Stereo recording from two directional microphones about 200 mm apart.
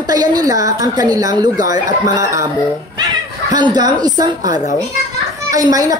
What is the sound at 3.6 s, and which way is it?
A woman's voice, 20° right (ahead or behind).